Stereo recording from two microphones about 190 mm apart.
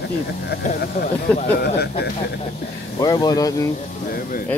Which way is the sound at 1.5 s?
55° left (ahead or behind).